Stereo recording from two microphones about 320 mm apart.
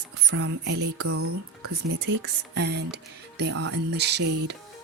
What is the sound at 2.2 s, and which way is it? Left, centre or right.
Speech, right.